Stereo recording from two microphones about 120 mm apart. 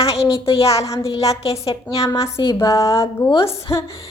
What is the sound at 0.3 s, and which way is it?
Speech, 55° left (ahead or behind).